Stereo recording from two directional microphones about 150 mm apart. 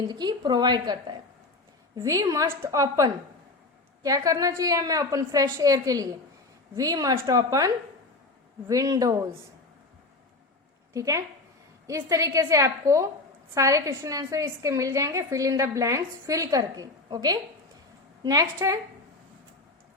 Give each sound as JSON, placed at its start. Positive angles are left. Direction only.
{"t": 0.1, "sound": "a woman's voice", "side_deg": -30}
{"t": 10.9, "sound": "a woman's voice", "side_deg": -20}